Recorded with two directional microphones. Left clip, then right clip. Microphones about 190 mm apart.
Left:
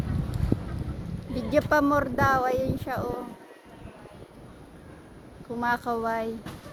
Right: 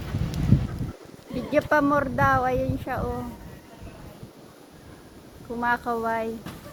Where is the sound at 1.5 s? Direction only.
15° left (ahead or behind).